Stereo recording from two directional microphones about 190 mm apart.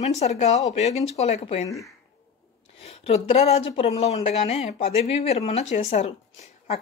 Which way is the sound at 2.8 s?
30° left (ahead or behind).